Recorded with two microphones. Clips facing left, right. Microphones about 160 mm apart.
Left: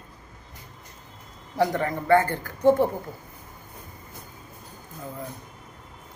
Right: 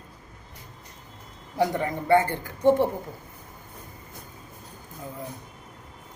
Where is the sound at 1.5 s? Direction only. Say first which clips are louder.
Left 1 dB; 20° right (ahead or behind).